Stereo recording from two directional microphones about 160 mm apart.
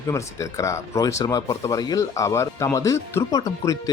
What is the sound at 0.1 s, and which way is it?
Speech, 20° left (ahead or behind).